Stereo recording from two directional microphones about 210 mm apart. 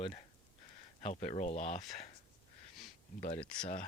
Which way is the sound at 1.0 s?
30° left (ahead or behind).